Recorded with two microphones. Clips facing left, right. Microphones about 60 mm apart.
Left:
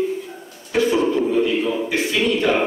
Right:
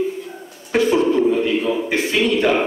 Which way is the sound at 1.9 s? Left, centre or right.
Right.